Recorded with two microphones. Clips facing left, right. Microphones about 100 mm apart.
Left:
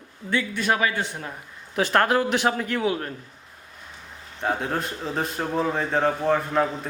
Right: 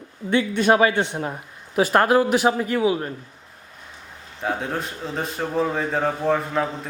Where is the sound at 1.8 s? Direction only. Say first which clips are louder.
Right 4 dB; 5° right (ahead or behind).